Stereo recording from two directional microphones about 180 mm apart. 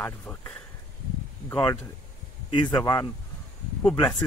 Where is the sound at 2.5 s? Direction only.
20° left (ahead or behind).